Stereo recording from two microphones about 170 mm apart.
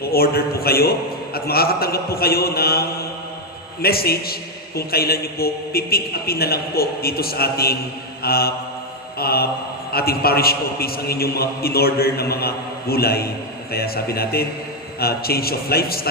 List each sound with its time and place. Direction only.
0.0 s a man's voice: 65° left (ahead or behind)